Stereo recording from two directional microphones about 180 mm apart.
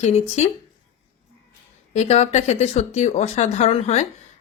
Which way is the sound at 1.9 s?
40° left (ahead or behind).